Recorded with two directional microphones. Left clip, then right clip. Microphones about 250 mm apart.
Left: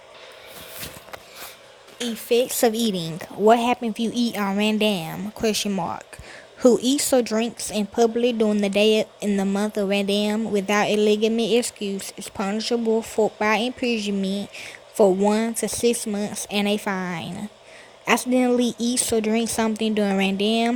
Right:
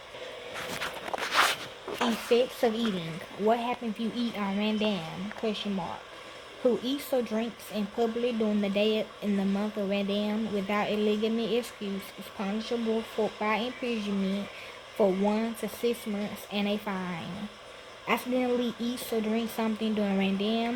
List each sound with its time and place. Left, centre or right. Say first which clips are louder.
2.3 s speech: left 7 dB; left